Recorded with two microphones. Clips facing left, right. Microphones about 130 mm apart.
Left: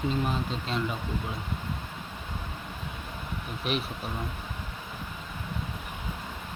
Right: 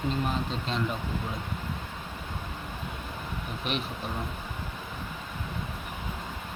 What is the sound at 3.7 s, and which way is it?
Speech, centre (ahead or behind).